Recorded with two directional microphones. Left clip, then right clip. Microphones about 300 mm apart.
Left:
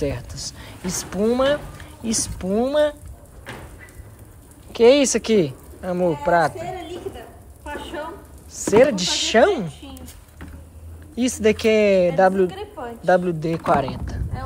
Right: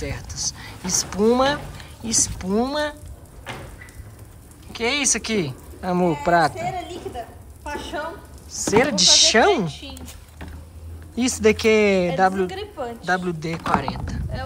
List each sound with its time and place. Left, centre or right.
0.0 s a woman's voice: centre
4.7 s a woman's voice: centre
11.1 s a woman's voice: centre